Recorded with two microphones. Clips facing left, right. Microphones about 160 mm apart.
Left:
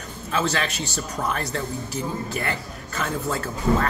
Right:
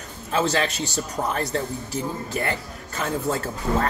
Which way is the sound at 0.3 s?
35° right (ahead or behind).